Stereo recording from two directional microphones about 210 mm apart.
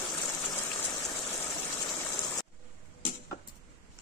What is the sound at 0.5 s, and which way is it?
Gush, 15° left (ahead or behind).